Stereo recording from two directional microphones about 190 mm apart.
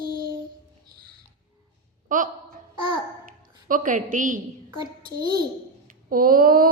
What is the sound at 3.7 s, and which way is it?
Speech, 45° right (ahead or behind).